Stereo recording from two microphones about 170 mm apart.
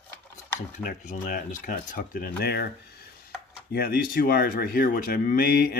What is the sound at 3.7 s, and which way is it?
Speech, 60° left (ahead or behind).